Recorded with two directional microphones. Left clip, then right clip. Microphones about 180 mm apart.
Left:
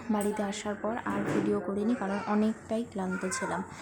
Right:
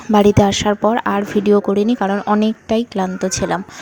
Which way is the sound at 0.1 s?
50° right (ahead or behind).